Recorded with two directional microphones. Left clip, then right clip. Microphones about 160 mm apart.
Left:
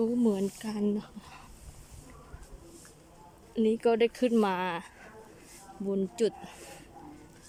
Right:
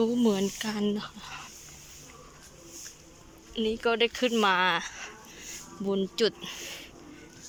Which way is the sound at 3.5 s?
30° left (ahead or behind).